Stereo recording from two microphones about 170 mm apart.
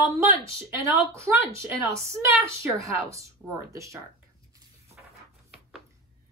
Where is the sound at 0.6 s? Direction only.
15° right (ahead or behind).